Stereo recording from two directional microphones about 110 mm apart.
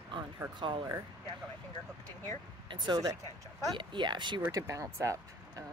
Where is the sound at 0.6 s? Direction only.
50° right (ahead or behind).